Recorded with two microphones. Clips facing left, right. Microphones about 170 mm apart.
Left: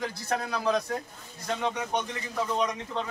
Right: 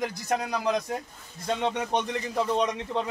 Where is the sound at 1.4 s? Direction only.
25° right (ahead or behind).